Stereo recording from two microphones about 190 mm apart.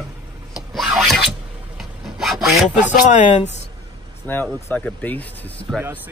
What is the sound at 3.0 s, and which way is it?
Speech, 40° left (ahead or behind).